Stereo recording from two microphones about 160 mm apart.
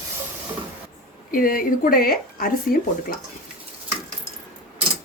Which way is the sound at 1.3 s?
60° left (ahead or behind).